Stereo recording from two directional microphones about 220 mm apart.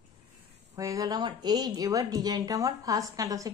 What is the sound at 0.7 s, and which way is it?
A woman's voice, 15° right (ahead or behind).